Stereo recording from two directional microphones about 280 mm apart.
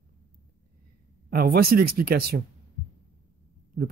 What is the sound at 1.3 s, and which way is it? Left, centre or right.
Speech, right.